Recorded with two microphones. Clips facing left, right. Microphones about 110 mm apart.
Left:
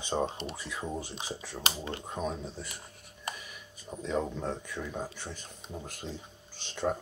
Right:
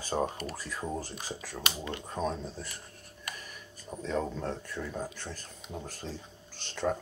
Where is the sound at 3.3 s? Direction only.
5° left (ahead or behind).